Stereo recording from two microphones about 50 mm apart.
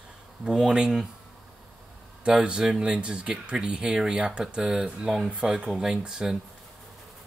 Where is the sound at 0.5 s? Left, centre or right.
Centre.